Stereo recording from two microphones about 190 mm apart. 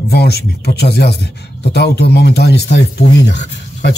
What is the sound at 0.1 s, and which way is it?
Speech, 60° left (ahead or behind).